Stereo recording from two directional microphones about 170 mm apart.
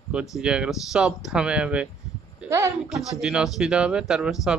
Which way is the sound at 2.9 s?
Centre (ahead or behind).